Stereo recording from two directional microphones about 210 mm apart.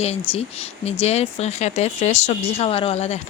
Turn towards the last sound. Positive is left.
turn(degrees=30)  # may be behind; listen again after turning